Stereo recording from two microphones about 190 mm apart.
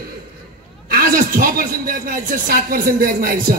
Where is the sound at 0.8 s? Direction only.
50° right (ahead or behind).